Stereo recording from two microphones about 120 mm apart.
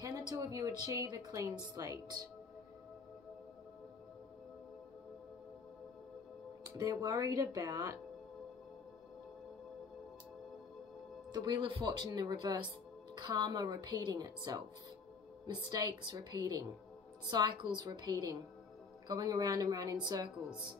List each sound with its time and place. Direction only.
0.0 s a woman's voice: 30° right (ahead or behind)
6.6 s a woman's voice: 30° right (ahead or behind)
11.3 s speech: 40° right (ahead or behind)